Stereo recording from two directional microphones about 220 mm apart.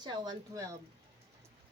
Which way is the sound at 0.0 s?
20° right (ahead or behind).